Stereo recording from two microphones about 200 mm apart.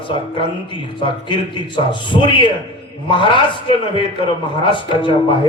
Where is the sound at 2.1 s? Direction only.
25° left (ahead or behind).